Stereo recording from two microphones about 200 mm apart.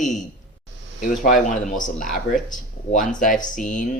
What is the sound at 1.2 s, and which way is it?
Speech, 40° left (ahead or behind).